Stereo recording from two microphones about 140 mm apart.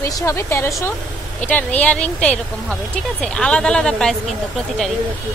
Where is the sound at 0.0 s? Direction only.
20° left (ahead or behind); by 4.2 s 5° left (ahead or behind).